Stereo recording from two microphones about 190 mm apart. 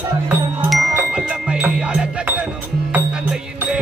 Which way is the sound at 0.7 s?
5° right (ahead or behind).